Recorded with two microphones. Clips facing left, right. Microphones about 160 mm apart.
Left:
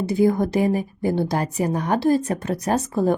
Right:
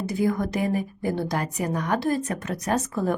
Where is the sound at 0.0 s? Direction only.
30° left (ahead or behind).